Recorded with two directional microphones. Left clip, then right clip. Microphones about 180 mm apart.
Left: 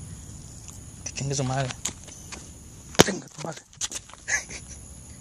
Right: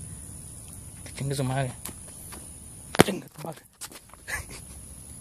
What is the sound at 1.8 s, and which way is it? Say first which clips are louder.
Clip-clop: left 9 dB; 35° left (ahead or behind).